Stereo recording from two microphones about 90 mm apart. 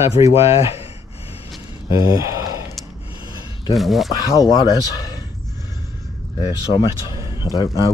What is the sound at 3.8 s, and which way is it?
Speech, centre (ahead or behind).